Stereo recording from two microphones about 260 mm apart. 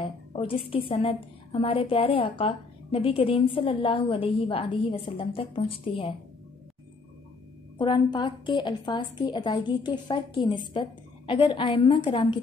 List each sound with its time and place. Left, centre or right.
0.0 s a woman's voice: centre
7.7 s a woman's voice: centre